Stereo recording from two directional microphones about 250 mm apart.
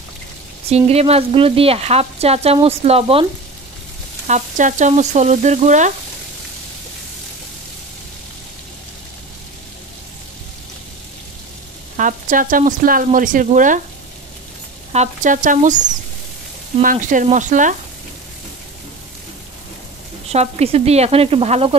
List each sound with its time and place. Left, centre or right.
0.7 s speech: right
4.3 s speech: right
12.0 s speech: right
14.9 s speech: right
20.2 s speech: right